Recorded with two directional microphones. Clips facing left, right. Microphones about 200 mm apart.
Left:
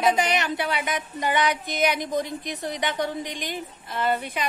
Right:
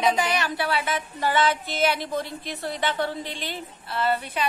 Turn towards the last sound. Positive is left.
turn(degrees=15)  # may be behind; listen again after turning